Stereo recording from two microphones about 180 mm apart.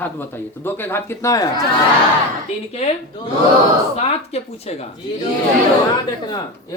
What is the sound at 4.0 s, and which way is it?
Speech, 35° left (ahead or behind).